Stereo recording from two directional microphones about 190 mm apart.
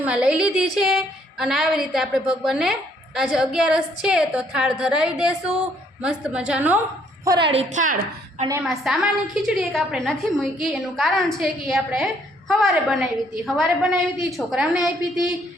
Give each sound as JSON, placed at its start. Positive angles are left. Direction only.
{"t": 0.0, "sound": "a woman's voice", "side_deg": -5}
{"t": 7.3, "sound": "a woman's voice", "side_deg": -25}
{"t": 8.6, "sound": "a woman's voice", "side_deg": 0}